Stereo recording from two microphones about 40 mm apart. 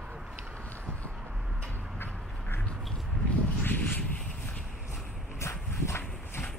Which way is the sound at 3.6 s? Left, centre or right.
Left.